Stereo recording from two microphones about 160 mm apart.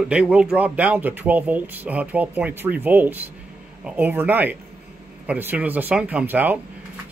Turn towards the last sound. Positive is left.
turn(degrees=-10)  # may be behind; listen again after turning